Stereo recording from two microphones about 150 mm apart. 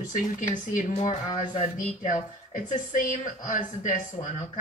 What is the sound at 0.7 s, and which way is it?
Speech, 50° left (ahead or behind).